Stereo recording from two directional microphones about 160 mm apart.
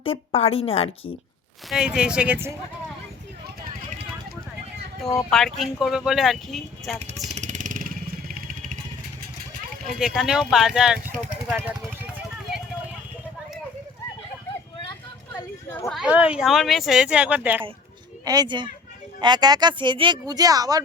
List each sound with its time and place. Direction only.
0.0 s a woman's voice: 35° left (ahead or behind)
1.7 s speech: 5° right (ahead or behind)
5.3 s speech: centre (ahead or behind)
7.0 s speech: 45° right (ahead or behind)
7.3 s vehicle: 50° right (ahead or behind)
10.0 s speech: 5° right (ahead or behind)
15.9 s speech: 5° right (ahead or behind)
18.3 s speech: 25° right (ahead or behind)